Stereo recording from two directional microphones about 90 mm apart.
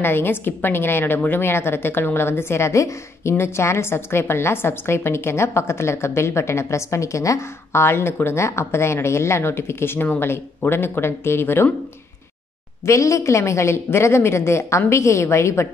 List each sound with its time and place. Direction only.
0.0 s a woman's voice: 25° left (ahead or behind)
12.8 s a woman's voice: 35° left (ahead or behind)